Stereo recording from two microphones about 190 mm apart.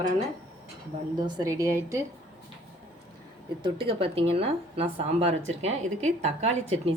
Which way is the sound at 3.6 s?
30° right (ahead or behind).